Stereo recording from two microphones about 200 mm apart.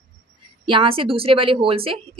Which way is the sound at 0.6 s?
25° right (ahead or behind).